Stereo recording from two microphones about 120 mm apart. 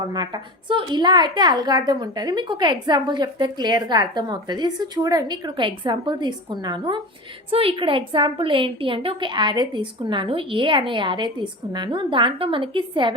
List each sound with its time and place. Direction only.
0.0 s a woman's voice: 35° right (ahead or behind)
7.5 s a woman's voice: 50° right (ahead or behind)